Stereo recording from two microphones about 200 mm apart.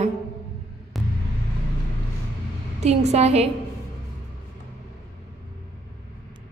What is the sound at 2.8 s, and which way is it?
Speech, 35° right (ahead or behind).